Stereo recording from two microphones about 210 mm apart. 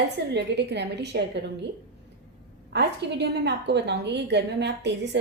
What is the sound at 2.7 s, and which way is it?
A woman's voice, 55° right (ahead or behind).